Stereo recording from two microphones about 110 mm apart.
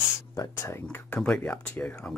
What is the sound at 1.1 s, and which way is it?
Speech, 10° left (ahead or behind).